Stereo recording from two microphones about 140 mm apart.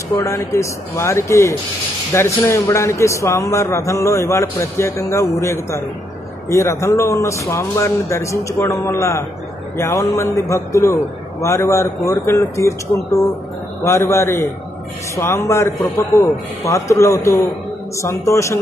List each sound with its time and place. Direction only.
0.1 s a man's voice: 20° left (ahead or behind)